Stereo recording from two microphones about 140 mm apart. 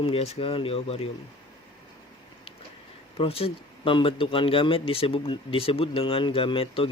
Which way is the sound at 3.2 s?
45° left (ahead or behind).